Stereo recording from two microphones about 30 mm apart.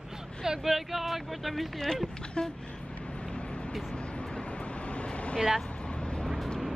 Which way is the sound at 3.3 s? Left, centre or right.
Left.